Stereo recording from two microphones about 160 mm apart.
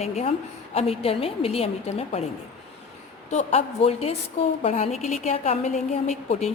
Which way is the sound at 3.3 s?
45° left (ahead or behind).